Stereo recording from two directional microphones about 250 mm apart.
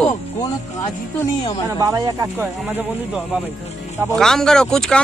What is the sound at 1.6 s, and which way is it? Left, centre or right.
Speech, centre.